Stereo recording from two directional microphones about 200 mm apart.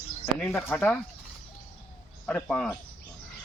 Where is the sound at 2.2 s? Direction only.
5° left (ahead or behind).